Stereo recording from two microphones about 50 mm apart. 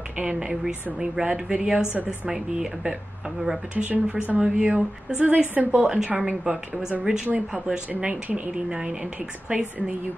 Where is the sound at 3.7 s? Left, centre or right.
Right.